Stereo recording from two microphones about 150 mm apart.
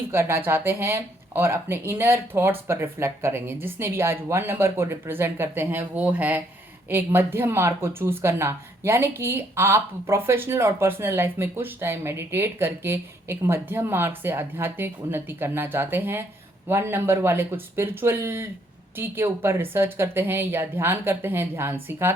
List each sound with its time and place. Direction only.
0.1 s speech: 15° right (ahead or behind)